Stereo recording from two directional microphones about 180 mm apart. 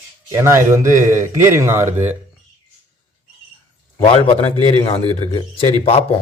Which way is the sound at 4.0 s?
30° left (ahead or behind).